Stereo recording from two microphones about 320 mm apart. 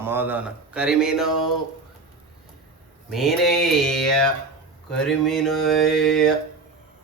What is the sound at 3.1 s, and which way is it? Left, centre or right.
Speech, centre.